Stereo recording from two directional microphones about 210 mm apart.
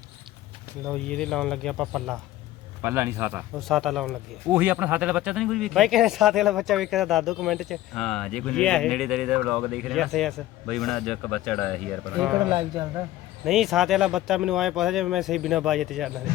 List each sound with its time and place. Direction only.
0.9 s speech: 5° left (ahead or behind)
2.8 s a man's voice: 10° right (ahead or behind)
3.7 s speech: centre (ahead or behind)
12.5 s a man's voice: 20° right (ahead or behind)
13.4 s speech: centre (ahead or behind)